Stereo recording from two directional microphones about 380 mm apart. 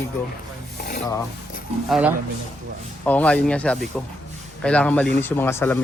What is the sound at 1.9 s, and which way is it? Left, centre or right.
Speech, centre.